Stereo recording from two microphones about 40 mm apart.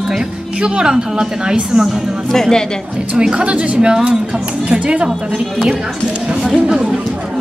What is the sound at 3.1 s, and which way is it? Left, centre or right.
Speech, right.